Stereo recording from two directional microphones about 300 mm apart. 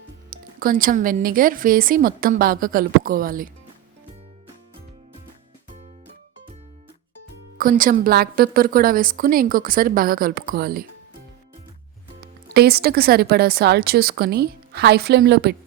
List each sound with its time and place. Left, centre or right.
0.3 s a woman's voice: right
7.6 s a woman's voice: right
12.2 s speech: right